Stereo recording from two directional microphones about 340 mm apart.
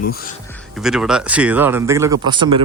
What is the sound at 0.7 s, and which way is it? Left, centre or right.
Speech, centre.